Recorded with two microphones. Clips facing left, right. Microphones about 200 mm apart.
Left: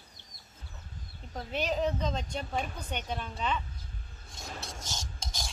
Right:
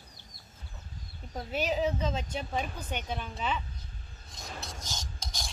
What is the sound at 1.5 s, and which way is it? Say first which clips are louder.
A woman's voice: right 1 dB; 5° right (ahead or behind).